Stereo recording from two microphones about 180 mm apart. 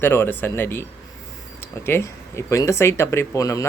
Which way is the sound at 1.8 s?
15° left (ahead or behind).